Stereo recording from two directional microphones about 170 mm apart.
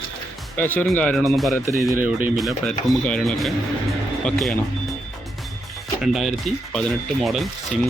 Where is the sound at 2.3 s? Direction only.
Centre (ahead or behind).